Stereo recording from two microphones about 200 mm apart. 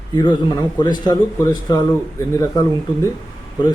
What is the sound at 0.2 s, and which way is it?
Speech, 20° left (ahead or behind).